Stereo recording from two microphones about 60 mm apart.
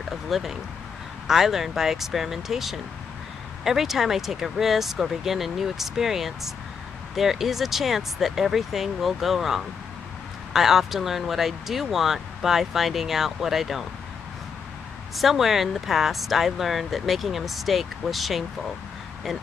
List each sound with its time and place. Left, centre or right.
0.3 s speech: centre
15.1 s speech: centre